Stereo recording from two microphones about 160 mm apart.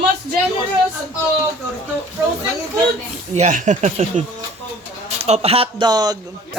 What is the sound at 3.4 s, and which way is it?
A woman's voice, 50° right (ahead or behind).